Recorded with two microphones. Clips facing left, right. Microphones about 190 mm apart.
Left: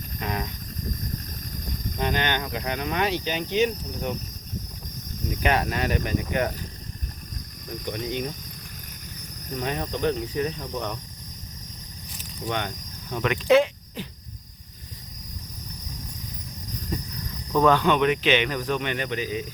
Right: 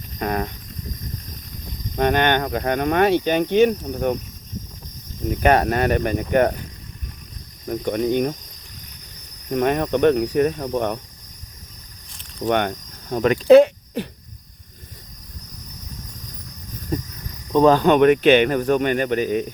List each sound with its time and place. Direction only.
0.2 s speech: 50° right (ahead or behind)
2.0 s speech: 60° right (ahead or behind)
5.4 s speech: 50° right (ahead or behind)
7.7 s speech: 55° right (ahead or behind)
9.5 s speech: 60° right (ahead or behind)
12.5 s speech: 55° right (ahead or behind)
13.1 s speech: 40° right (ahead or behind)
16.9 s cricket: 50° right (ahead or behind)
17.5 s speech: 30° right (ahead or behind); by 19.5 s 55° right (ahead or behind)